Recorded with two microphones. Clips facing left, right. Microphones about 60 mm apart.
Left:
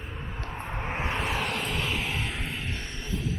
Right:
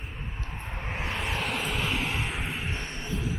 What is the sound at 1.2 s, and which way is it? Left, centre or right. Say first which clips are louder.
Vehicle: left 1 dB; centre.